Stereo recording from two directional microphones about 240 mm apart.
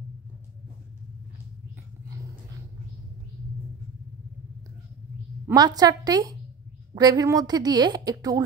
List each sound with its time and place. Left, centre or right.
5.5 s a woman's voice: centre